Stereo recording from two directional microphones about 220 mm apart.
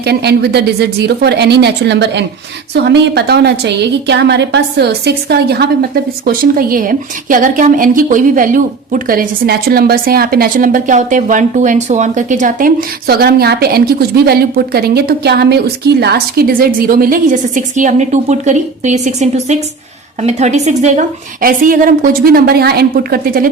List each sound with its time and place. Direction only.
0.0 s a woman's voice: 50° right (ahead or behind)